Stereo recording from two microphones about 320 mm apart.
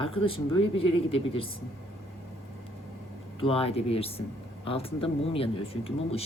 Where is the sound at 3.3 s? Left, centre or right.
Centre.